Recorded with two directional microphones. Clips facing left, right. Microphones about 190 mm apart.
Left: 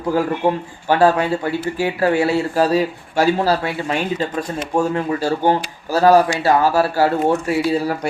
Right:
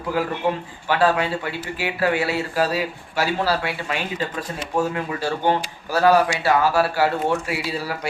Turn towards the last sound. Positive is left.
turn(degrees=40)  # may be behind; listen again after turning